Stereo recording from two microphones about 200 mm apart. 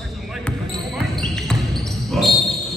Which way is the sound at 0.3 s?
5° left (ahead or behind).